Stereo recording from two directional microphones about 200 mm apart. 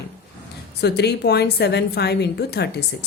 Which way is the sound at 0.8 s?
55° left (ahead or behind).